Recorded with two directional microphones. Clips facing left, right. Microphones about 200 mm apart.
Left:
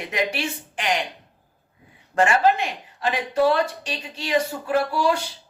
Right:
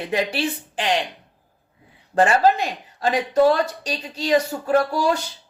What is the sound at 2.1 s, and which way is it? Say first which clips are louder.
Speech: right 2 dB; 35° right (ahead or behind).